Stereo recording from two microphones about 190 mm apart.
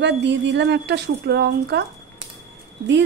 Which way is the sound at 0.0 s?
65° right (ahead or behind).